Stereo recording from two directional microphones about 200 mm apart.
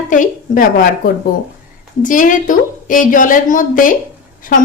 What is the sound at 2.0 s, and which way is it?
A woman's voice, 40° left (ahead or behind).